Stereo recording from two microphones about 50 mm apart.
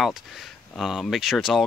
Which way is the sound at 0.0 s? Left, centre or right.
Centre.